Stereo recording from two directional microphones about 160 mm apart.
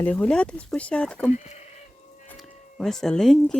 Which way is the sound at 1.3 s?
45° left (ahead or behind).